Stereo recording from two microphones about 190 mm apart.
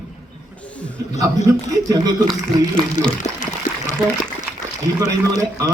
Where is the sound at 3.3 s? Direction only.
5° left (ahead or behind).